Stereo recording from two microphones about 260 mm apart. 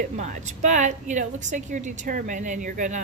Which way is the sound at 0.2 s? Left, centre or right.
Right.